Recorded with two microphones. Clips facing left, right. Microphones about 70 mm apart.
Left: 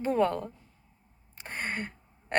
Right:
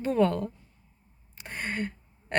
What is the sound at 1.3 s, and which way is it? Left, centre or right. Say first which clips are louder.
Gasp: right 1 dB; left.